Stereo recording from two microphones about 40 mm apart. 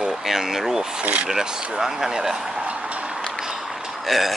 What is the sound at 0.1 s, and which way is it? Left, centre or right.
Speech, centre.